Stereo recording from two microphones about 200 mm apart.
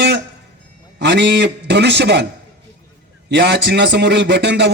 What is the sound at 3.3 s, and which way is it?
Speech, 60° right (ahead or behind).